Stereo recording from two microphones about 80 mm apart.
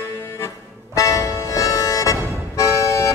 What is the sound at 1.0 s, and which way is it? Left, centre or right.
Music, left.